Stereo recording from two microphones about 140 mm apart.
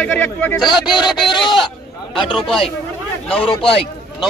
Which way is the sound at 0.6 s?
5° right (ahead or behind).